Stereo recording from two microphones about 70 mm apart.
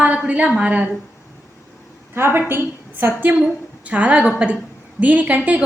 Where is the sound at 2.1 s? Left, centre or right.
Right.